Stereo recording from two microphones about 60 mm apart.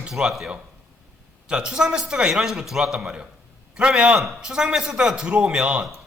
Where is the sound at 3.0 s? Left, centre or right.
Centre.